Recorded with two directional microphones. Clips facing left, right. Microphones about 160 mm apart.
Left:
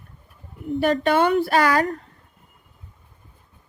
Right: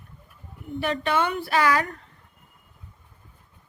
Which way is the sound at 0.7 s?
40° left (ahead or behind).